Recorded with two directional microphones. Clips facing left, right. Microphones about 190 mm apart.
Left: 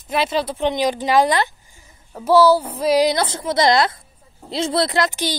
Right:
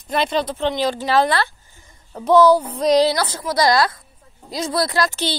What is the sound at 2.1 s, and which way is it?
Speech, 5° left (ahead or behind).